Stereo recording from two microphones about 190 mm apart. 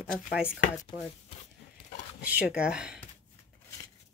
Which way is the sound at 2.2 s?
5° right (ahead or behind).